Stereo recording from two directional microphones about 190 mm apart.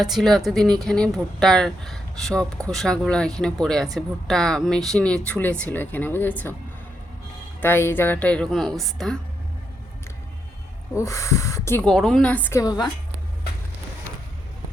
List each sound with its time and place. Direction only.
0.0 s speech: centre (ahead or behind)
7.6 s a woman's voice: 10° left (ahead or behind)
10.9 s a woman's voice: 15° left (ahead or behind)
11.9 s a woman's voice: centre (ahead or behind); by 12.9 s 20° left (ahead or behind)